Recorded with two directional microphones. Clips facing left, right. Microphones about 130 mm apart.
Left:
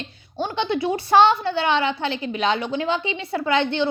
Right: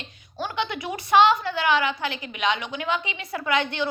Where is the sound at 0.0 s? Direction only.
30° left (ahead or behind).